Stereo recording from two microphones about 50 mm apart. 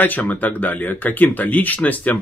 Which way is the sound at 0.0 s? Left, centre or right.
Left.